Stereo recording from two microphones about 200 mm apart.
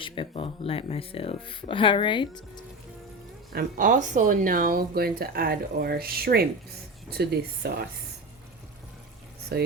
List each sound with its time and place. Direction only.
0.0 s speech: 25° left (ahead or behind)
3.5 s speech: 45° right (ahead or behind)
9.5 s speech: 55° right (ahead or behind)